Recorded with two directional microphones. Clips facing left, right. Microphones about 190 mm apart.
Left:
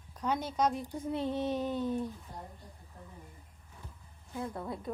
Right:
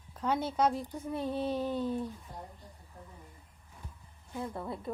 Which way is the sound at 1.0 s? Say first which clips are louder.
Left 1 dB; 20° left (ahead or behind).